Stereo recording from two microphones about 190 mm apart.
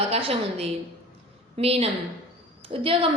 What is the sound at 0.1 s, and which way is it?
A woman's voice, 30° right (ahead or behind).